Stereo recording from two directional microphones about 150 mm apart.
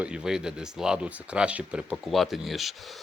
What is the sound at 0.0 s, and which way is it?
Speech, 5° right (ahead or behind).